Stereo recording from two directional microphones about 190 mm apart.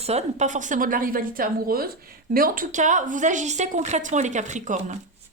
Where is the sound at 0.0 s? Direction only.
35° right (ahead or behind).